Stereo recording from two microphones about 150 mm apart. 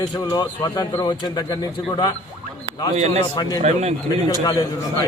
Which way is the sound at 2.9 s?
45° right (ahead or behind).